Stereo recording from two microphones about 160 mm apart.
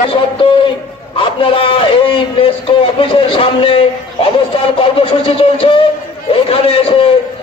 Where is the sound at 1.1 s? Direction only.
35° left (ahead or behind).